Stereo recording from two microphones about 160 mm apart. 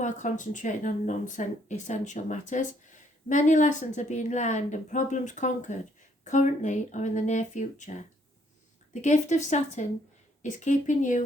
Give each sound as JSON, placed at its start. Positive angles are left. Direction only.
{"t": 0.0, "sound": "speech", "side_deg": 50}